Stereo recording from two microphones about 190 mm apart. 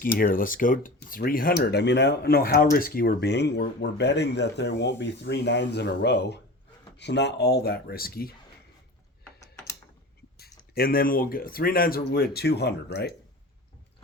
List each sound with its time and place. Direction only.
0.3 s speech: 45° left (ahead or behind)
10.5 s speech: 50° left (ahead or behind)